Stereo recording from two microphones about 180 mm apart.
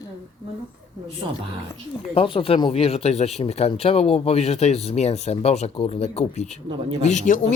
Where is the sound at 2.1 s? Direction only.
30° left (ahead or behind).